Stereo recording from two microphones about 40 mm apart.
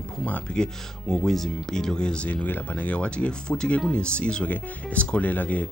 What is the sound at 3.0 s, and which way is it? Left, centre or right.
Speech, left.